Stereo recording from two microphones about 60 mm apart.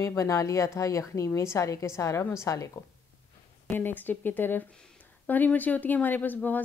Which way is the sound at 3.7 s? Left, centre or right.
Left.